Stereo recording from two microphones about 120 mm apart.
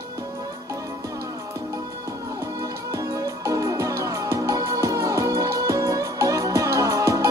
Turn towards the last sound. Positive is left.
turn(degrees=-25)  # may be behind; listen again after turning